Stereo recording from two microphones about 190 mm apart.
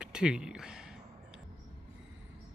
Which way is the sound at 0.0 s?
5° right (ahead or behind).